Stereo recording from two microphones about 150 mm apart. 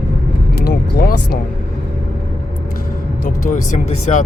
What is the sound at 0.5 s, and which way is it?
Speech, 85° left.